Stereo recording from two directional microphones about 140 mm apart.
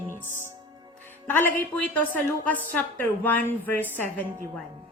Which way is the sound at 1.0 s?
15° left (ahead or behind).